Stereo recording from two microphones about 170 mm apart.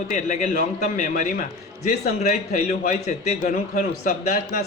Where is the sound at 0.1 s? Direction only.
45° left (ahead or behind).